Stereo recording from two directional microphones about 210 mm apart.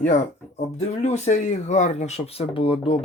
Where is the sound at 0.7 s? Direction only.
35° left (ahead or behind).